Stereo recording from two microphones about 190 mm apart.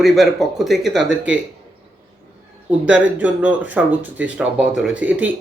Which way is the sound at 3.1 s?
10° right (ahead or behind).